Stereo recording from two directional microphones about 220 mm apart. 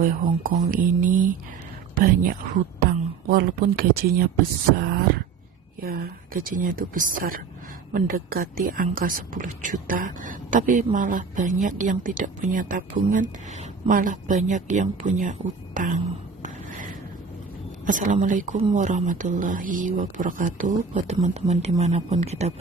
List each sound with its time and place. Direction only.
0.0 s speech: 40° right (ahead or behind)
3.2 s speech: 40° right (ahead or behind)
4.8 s wail: 45° right (ahead or behind)
5.8 s speech: 40° right (ahead or behind)
16.4 s a sound: 35° right (ahead or behind)
17.8 s speech: 40° right (ahead or behind)